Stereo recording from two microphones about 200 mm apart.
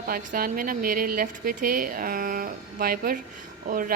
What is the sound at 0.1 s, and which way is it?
A woman's voice, 45° right (ahead or behind).